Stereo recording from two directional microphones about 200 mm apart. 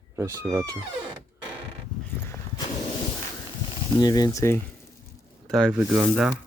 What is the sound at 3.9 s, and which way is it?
Speech, 20° left (ahead or behind).